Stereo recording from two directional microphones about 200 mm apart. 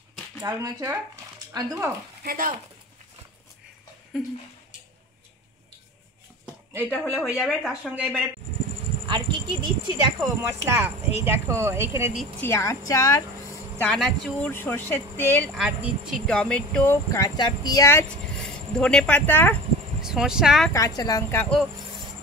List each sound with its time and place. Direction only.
0.4 s speech: 15° right (ahead or behind)
2.2 s speech: 45° right (ahead or behind)
6.8 s speech: 5° left (ahead or behind)
9.0 s speech: 25° right (ahead or behind)
12.2 s speech: 10° left (ahead or behind)
13.8 s speech: centre (ahead or behind)
14.5 s speech: 10° left (ahead or behind)
18.4 s speech: 5° left (ahead or behind)
20.0 s speech: 5° right (ahead or behind)
20.7 s speech: 20° left (ahead or behind)